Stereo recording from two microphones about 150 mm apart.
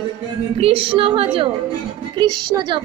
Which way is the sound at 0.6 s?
40° right (ahead or behind).